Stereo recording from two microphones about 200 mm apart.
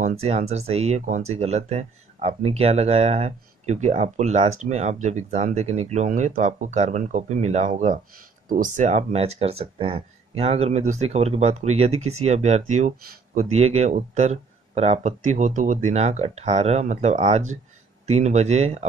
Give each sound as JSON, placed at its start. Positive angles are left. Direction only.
{"t": 0.2, "sound": "speech", "side_deg": -30}